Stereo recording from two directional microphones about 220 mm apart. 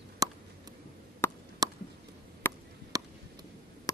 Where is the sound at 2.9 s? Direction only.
15° right (ahead or behind).